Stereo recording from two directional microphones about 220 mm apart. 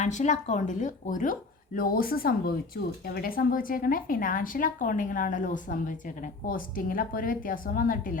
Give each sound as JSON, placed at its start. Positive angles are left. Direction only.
{"t": 0.0, "sound": "speech", "side_deg": 35}